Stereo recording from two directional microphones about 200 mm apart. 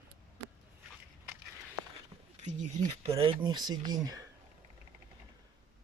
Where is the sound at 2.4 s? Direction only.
35° right (ahead or behind); by 4.2 s 20° right (ahead or behind).